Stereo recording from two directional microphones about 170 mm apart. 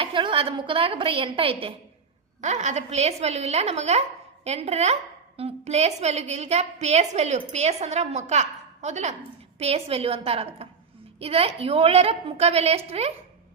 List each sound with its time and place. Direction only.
0.0 s a woman's voice: 30° right (ahead or behind)
2.4 s a woman's voice: 45° right (ahead or behind)